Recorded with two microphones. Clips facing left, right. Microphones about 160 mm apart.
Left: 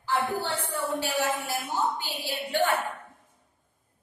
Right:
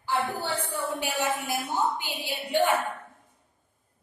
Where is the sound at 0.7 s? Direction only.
10° right (ahead or behind).